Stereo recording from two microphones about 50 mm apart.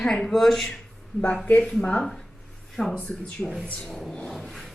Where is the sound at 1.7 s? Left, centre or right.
Centre.